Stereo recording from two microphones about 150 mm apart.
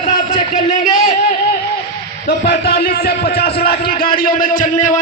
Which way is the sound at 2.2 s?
90° left.